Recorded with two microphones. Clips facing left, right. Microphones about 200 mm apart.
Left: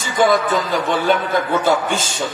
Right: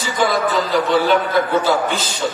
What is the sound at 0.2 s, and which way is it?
A man's voice, 45° left (ahead or behind).